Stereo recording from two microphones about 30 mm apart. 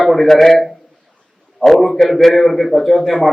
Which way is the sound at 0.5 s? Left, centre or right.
Centre.